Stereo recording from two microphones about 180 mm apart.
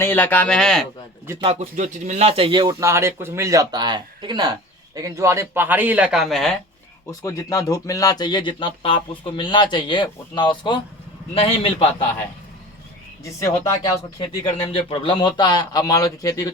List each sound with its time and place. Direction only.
0.0 s speech: 10° left (ahead or behind)
1.4 s speech: 35° right (ahead or behind); by 6.6 s centre (ahead or behind)
7.1 s a man's voice: 20° left (ahead or behind)
14.2 s speech: 30° left (ahead or behind)